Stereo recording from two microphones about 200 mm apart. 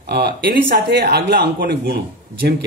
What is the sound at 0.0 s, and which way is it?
Speech, 55° right (ahead or behind).